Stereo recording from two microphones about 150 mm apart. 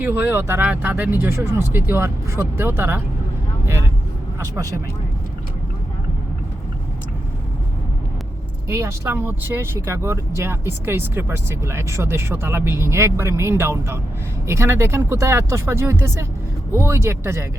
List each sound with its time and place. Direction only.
0.0 s speech: 15° right (ahead or behind)
4.4 s speech: 20° right (ahead or behind)
8.6 s speech: 20° right (ahead or behind)